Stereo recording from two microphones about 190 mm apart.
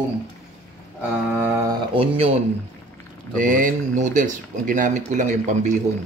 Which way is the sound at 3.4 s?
45° right (ahead or behind).